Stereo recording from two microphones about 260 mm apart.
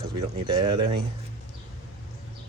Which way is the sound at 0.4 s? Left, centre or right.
Centre.